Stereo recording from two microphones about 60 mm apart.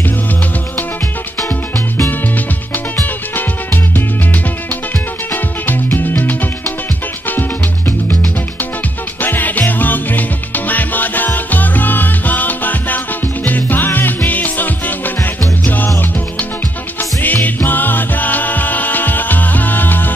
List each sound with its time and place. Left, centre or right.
3.0 s music: left
5.3 s music: left
9.2 s music: left
17.2 s music: left